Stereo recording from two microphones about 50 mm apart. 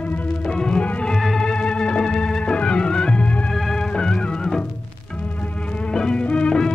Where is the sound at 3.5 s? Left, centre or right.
Centre.